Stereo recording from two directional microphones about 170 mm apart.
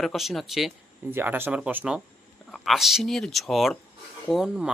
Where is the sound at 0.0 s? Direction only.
Centre (ahead or behind).